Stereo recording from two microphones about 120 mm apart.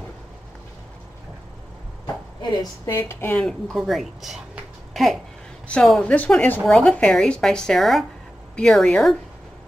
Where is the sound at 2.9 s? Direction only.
20° left (ahead or behind).